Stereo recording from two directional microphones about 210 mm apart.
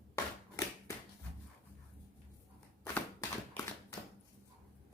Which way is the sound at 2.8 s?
10° left (ahead or behind).